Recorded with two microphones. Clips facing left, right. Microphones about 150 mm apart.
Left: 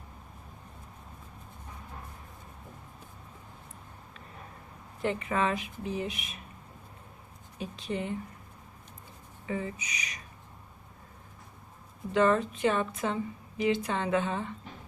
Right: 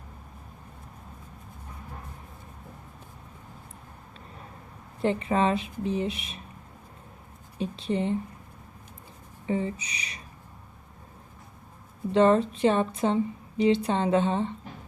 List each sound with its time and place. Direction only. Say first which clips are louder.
4.9 s speech: right 5 dB; 30° right (ahead or behind)
7.6 s a woman's voice: right 6 dB; 30° right (ahead or behind)
9.5 s a woman's voice: right 6 dB; 30° right (ahead or behind)
12.1 s a woman's voice: right 5 dB; 30° right (ahead or behind)